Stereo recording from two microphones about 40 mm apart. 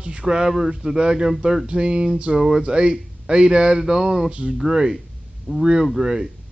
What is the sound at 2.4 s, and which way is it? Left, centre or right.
Speech, centre.